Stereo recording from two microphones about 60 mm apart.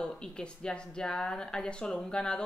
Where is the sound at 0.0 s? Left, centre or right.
Centre.